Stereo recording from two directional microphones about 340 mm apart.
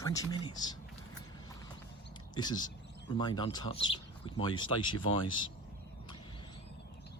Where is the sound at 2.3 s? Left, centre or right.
Centre.